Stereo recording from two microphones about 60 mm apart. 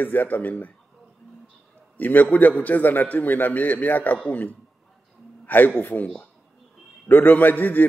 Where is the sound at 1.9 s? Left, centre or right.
Left.